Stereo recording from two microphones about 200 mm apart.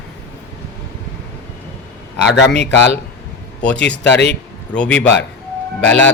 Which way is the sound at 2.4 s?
55° left (ahead or behind).